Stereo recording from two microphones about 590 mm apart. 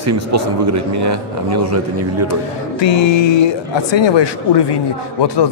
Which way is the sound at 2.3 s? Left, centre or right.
Left.